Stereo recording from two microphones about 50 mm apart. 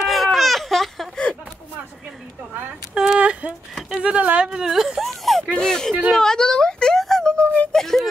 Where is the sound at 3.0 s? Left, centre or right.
Centre.